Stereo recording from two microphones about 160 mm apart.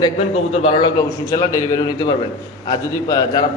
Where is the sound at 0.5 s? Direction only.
40° left (ahead or behind).